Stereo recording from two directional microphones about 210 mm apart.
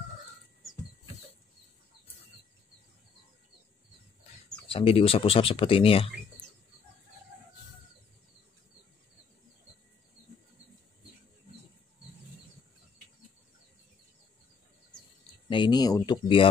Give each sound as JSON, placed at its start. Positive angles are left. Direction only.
{"t": 4.6, "sound": "speech", "side_deg": 25}
{"t": 15.5, "sound": "speech", "side_deg": 20}